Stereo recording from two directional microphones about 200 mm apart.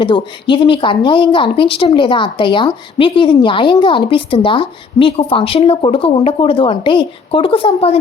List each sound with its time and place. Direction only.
0.0 s speech: 25° left (ahead or behind)